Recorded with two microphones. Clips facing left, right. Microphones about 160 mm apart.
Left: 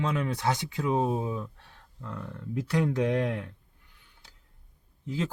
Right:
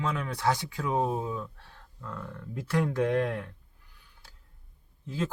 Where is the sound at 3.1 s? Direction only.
20° left (ahead or behind).